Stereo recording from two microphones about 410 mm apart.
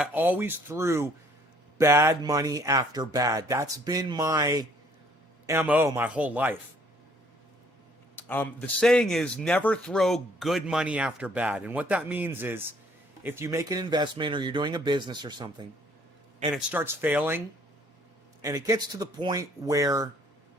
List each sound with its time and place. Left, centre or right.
0.0 s a man's voice: centre
8.1 s a man's voice: centre
18.4 s speech: centre